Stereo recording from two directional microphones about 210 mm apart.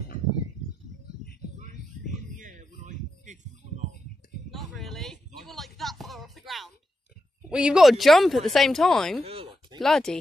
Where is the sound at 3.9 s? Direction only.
45° left (ahead or behind).